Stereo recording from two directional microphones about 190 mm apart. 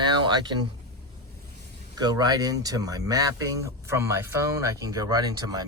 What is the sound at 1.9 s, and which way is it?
Speech, 20° right (ahead or behind).